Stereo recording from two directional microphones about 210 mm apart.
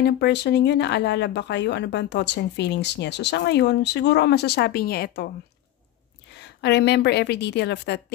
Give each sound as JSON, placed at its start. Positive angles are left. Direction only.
{"t": 0.0, "sound": "speech", "side_deg": 50}
{"t": 6.6, "sound": "speech", "side_deg": 55}